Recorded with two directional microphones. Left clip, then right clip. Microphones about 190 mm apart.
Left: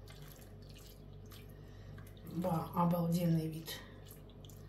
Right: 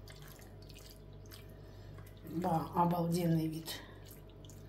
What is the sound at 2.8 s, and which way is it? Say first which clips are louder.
A woman's voice: right 2 dB; 45° right (ahead or behind).